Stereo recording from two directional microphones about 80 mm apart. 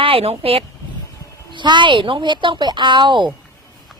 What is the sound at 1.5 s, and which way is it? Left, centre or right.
A woman's voice, right.